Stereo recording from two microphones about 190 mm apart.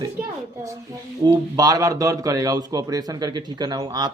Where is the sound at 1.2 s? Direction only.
20° right (ahead or behind).